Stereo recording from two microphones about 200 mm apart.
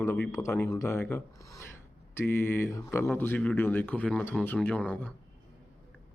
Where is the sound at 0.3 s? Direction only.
15° left (ahead or behind).